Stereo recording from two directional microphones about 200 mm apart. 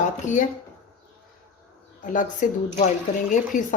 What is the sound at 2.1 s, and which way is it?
Speech, 35° left (ahead or behind).